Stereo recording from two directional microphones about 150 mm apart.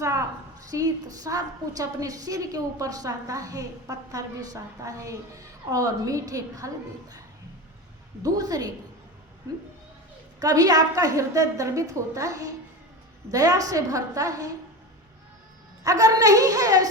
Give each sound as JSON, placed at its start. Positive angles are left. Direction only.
{"t": 0.7, "sound": "a woman's voice", "side_deg": -25}
{"t": 8.2, "sound": "a woman's voice", "side_deg": -25}
{"t": 10.4, "sound": "a woman's voice", "side_deg": -25}
{"t": 15.8, "sound": "a woman's voice", "side_deg": -20}